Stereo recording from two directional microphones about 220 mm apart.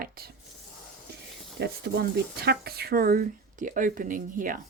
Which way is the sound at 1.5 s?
50° right (ahead or behind).